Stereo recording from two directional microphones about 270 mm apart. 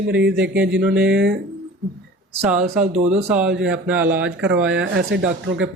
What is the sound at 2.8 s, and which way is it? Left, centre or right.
Speech, right.